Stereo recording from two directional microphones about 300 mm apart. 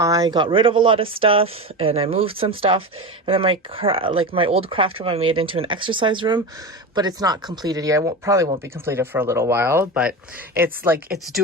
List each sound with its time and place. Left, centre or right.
0.0 s speech: centre